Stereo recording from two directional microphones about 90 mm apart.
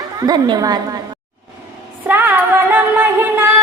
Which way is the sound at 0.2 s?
50° right (ahead or behind).